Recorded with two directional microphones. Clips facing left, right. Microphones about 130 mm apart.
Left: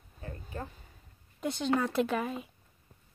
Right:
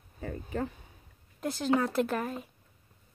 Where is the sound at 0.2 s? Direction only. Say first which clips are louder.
Right 7 dB; 90° right.